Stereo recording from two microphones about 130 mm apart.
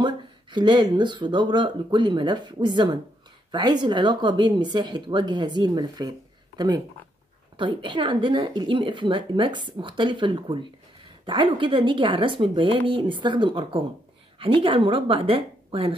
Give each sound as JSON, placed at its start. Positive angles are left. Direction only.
{"t": 0.0, "sound": "a woman's voice", "side_deg": -35}